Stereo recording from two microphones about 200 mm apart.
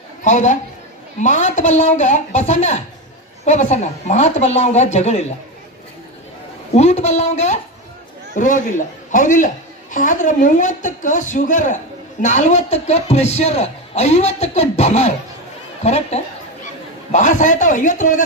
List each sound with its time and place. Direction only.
0.3 s a man's voice: 35° left (ahead or behind)
6.7 s a man's voice: 35° left (ahead or behind)